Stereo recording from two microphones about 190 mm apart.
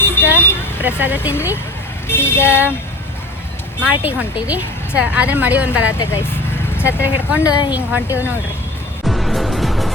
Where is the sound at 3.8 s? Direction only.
5° right (ahead or behind).